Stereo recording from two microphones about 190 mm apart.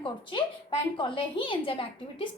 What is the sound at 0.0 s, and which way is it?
A woman's voice, 25° left (ahead or behind).